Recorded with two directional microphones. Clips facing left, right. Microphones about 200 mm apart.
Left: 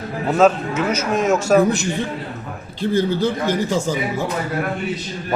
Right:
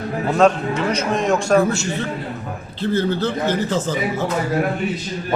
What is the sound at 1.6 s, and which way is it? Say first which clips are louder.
Speech: left 2 dB; 15° left (ahead or behind).